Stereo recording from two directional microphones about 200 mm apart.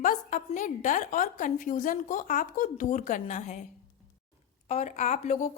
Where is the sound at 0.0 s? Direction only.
40° left (ahead or behind).